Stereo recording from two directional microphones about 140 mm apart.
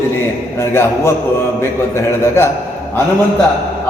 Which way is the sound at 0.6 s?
20° left (ahead or behind).